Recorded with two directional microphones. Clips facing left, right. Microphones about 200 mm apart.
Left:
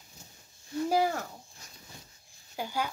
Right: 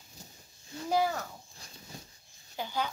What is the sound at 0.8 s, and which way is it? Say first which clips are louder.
Speech: left 1 dB; 10° left (ahead or behind).